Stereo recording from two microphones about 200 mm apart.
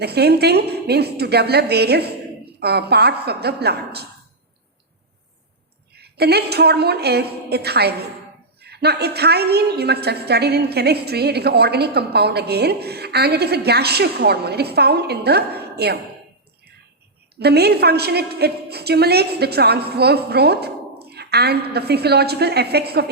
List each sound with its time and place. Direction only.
0.0 s a woman's voice: 55° right (ahead or behind)
5.9 s a woman's voice: 55° right (ahead or behind)
17.4 s a woman's voice: 55° right (ahead or behind)